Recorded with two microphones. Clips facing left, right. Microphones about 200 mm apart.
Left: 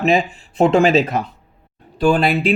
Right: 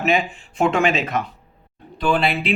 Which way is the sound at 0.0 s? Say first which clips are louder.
Left 4 dB; 35° left (ahead or behind).